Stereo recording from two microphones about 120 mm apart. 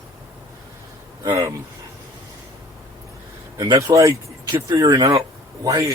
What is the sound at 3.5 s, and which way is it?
A man's voice, 30° right (ahead or behind).